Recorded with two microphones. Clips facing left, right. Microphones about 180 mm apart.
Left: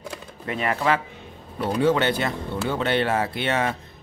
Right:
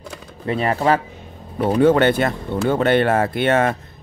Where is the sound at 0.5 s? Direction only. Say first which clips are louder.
Right 5 dB; 35° right (ahead or behind).